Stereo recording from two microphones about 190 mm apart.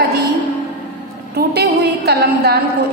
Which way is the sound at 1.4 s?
55° right (ahead or behind).